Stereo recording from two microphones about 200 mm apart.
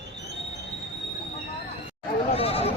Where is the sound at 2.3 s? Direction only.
30° left (ahead or behind).